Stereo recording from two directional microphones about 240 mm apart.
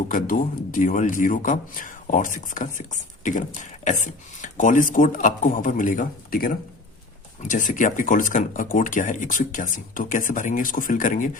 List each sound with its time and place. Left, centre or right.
0.1 s a man's voice: left